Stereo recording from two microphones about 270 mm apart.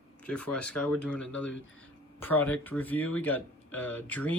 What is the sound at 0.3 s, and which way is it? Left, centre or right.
Speech, centre.